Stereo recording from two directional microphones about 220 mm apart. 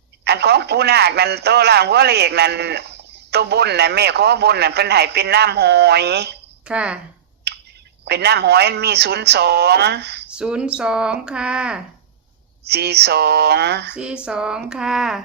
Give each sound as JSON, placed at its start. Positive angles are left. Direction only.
{"t": 0.3, "sound": "a man's voice", "side_deg": -50}
{"t": 6.7, "sound": "speech", "side_deg": -5}
{"t": 8.0, "sound": "a man's voice", "side_deg": -50}
{"t": 10.2, "sound": "speech", "side_deg": -5}
{"t": 12.6, "sound": "a man's voice", "side_deg": -50}
{"t": 13.9, "sound": "speech", "side_deg": -5}